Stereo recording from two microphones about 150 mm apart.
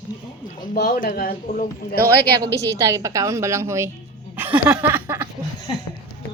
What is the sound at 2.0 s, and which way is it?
Speech, 90° right.